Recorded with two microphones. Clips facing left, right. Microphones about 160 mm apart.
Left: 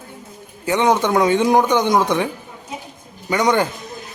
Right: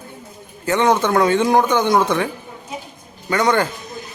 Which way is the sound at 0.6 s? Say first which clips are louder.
Even; 15° left (ahead or behind).